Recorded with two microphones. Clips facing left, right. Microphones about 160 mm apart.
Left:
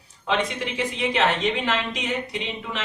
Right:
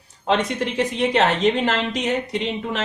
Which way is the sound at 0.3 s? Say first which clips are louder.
Right 4 dB; 40° right (ahead or behind).